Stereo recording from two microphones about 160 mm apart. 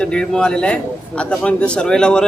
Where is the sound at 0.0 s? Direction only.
5° left (ahead or behind).